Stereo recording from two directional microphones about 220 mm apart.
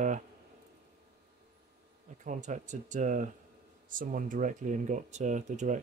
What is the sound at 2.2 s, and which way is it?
Speech, 35° right (ahead or behind).